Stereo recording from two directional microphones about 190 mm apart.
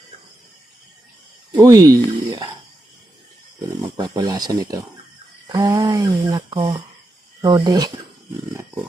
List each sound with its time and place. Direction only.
1.5 s speech: 20° right (ahead or behind)
3.9 s speech: 20° right (ahead or behind)